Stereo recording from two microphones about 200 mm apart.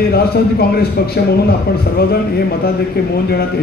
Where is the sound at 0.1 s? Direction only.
50° left (ahead or behind).